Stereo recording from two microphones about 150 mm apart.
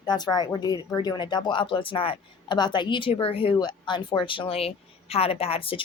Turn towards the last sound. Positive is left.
turn(degrees=40)  # may be behind; listen again after turning